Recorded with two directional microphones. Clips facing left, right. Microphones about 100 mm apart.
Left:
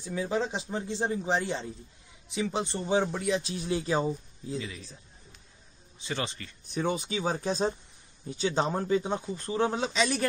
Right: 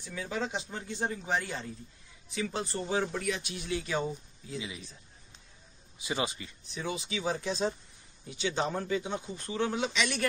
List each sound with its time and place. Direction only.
0.0 s speech: 30° left (ahead or behind)
4.6 s speech: 15° right (ahead or behind)
6.0 s speech: 10° right (ahead or behind)
6.7 s speech: 50° left (ahead or behind)